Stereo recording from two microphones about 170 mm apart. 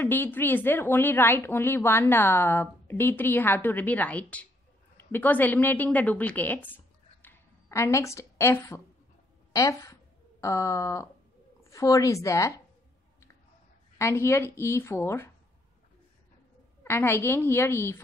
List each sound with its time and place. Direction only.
0.0 s a woman's voice: 10° left (ahead or behind)
13.9 s a woman's voice: 15° left (ahead or behind)
16.8 s a woman's voice: 15° left (ahead or behind)